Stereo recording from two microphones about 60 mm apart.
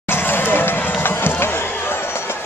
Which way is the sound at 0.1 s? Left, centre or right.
Left.